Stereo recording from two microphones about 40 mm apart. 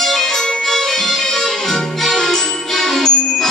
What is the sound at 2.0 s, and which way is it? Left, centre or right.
Music, centre.